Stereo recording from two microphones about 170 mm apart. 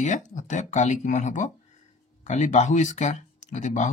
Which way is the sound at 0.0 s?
45° left (ahead or behind).